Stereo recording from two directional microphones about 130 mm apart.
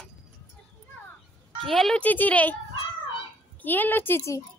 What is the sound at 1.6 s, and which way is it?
A child's voice, centre (ahead or behind).